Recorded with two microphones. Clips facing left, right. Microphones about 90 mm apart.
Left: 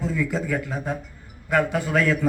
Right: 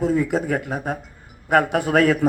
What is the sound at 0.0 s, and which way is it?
A man's voice, 55° right (ahead or behind).